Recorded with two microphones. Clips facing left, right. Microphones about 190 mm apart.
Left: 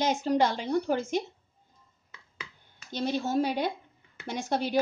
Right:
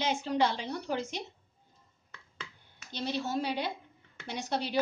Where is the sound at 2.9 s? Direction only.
50° left (ahead or behind).